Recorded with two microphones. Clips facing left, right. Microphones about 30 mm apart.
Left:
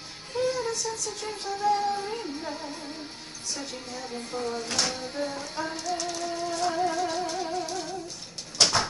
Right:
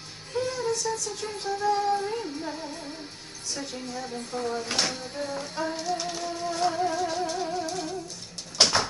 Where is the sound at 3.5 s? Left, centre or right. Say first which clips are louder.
Right 3 dB; centre.